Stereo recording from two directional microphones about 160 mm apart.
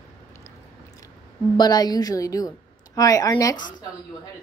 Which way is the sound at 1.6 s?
25° left (ahead or behind).